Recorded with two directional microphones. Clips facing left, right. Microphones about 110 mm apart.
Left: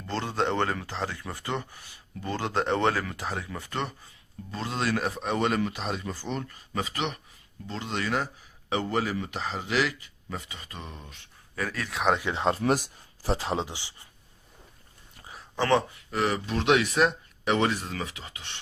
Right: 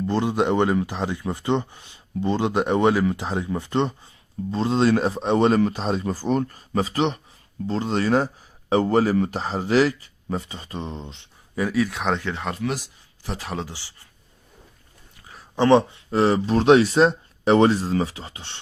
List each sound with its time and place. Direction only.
0.1 s speech: 15° right (ahead or behind); by 12.2 s centre (ahead or behind)
12.2 s speech: 20° left (ahead or behind)
12.5 s speech: 45° left (ahead or behind)
13.2 s speech: 30° left (ahead or behind)
15.5 s speech: 20° right (ahead or behind)